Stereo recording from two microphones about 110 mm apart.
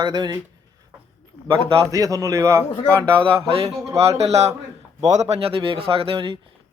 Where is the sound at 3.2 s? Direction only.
60° right (ahead or behind).